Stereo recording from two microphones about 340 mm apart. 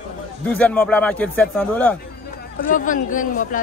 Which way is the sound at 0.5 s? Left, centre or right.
Centre.